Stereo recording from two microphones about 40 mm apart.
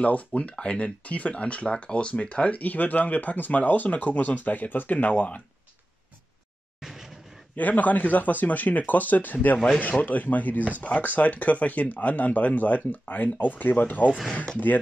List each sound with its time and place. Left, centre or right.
0.0 s speech: left
2.6 s speech: left
6.8 s a sound: centre
7.5 s speech: left